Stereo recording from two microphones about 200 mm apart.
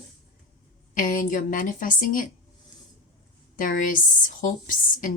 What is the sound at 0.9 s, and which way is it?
A woman's voice, 40° left (ahead or behind).